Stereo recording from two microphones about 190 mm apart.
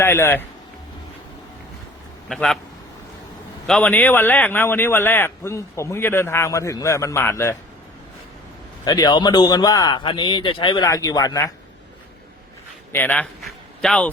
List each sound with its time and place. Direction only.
0.0 s a man's voice: 10° left (ahead or behind)
2.3 s a man's voice: centre (ahead or behind)
3.7 s a man's voice: 10° left (ahead or behind)
8.8 s speech: 20° left (ahead or behind)
12.9 s a man's voice: 10° left (ahead or behind)